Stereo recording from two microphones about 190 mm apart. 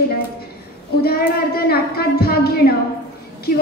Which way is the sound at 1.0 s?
55° left (ahead or behind).